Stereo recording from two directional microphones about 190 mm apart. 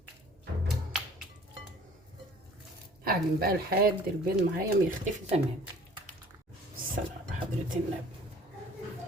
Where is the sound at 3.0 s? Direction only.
50° right (ahead or behind).